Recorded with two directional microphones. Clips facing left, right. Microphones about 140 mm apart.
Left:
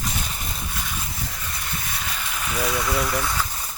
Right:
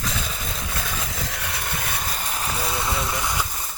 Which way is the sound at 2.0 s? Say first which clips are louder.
Right 2 dB; 40° right (ahead or behind).